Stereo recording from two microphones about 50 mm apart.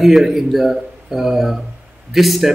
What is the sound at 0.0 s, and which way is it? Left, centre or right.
Speech, centre.